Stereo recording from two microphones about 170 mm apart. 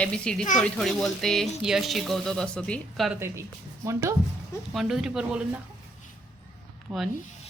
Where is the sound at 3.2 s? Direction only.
15° right (ahead or behind).